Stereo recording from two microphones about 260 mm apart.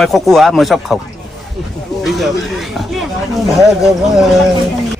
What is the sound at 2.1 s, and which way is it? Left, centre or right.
Speech, centre.